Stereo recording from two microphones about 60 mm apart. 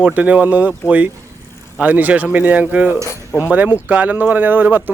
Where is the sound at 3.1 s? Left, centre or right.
Left.